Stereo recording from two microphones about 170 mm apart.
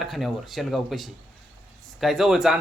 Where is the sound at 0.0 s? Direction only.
Centre (ahead or behind).